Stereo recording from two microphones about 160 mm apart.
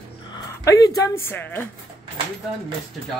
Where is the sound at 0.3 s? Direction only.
20° left (ahead or behind).